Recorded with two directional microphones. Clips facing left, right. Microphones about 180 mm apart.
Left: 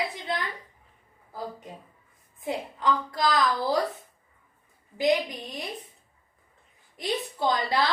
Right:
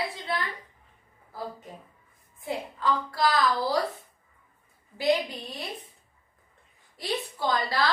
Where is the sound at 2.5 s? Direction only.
20° left (ahead or behind).